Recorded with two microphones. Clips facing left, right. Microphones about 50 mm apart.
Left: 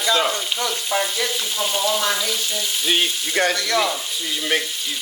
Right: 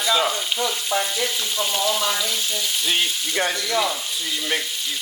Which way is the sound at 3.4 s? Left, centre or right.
Left.